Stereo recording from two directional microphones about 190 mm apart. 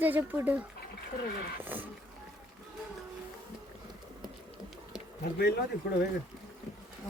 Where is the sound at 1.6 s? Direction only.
10° right (ahead or behind).